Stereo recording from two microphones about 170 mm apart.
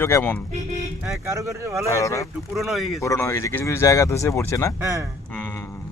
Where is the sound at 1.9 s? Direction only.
20° left (ahead or behind).